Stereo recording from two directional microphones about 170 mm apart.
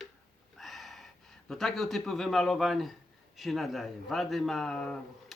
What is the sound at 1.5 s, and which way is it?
Speech, centre (ahead or behind).